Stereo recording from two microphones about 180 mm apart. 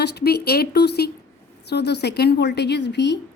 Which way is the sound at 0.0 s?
65° left (ahead or behind).